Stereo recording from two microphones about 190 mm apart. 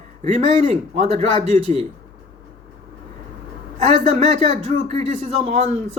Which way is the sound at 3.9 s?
35° right (ahead or behind).